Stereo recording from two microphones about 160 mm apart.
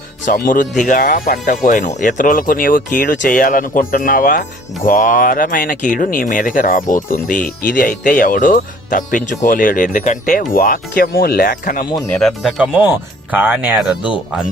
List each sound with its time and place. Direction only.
0.3 s speech: 60° left (ahead or behind)
12.1 s speech: centre (ahead or behind)